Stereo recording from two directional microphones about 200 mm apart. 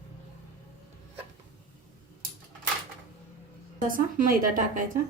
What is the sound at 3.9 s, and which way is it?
Speech, 45° right (ahead or behind).